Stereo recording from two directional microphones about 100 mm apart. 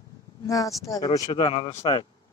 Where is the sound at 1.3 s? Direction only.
85° left.